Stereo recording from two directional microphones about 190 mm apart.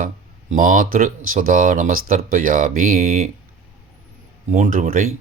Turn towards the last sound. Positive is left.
turn(degrees=-45)  # may be behind; listen again after turning